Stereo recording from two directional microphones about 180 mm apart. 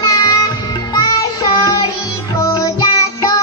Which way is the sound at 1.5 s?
20° left (ahead or behind).